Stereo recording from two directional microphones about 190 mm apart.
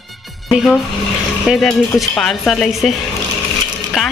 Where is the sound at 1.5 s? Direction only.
Centre (ahead or behind).